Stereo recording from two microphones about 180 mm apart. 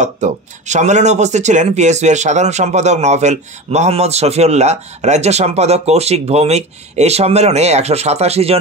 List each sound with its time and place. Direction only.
0.0 s speech: 40° right (ahead or behind)